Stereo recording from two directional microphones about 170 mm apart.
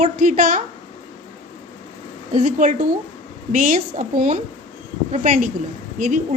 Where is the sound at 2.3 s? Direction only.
50° right (ahead or behind).